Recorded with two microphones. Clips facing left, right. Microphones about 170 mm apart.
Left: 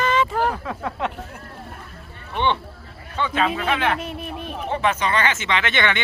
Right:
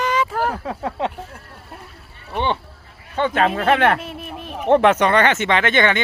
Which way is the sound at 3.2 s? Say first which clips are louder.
Right 4 dB; 50° right (ahead or behind).